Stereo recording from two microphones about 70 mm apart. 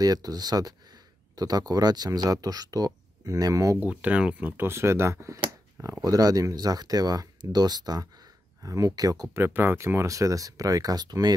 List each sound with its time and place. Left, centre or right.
0.0 s speech: right
3.7 s speech: right
9.3 s speech: right